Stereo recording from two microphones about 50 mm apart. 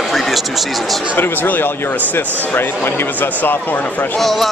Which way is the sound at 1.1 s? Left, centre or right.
Left.